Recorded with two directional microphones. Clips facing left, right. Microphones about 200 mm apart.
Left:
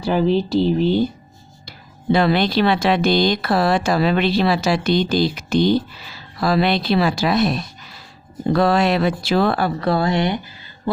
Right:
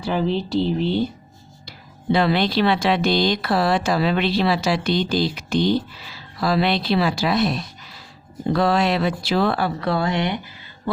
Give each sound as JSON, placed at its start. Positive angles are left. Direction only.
{"t": 0.0, "sound": "speech", "side_deg": 40}
{"t": 2.1, "sound": "speech", "side_deg": 50}